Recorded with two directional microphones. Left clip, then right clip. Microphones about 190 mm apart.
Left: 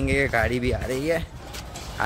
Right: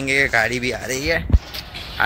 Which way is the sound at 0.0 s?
Centre (ahead or behind).